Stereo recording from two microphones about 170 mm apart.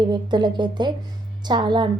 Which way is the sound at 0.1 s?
25° right (ahead or behind).